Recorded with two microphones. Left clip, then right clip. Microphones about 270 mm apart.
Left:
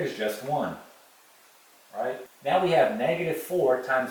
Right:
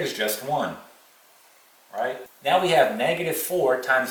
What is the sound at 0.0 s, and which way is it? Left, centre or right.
Speech, centre.